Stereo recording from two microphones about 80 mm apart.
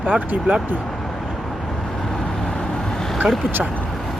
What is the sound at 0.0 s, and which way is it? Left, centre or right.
Speech, centre.